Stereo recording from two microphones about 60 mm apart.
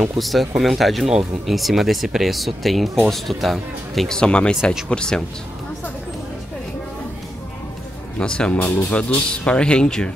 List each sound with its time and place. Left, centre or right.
0.1 s speech: centre
4.2 s speech: centre
8.2 s speech: centre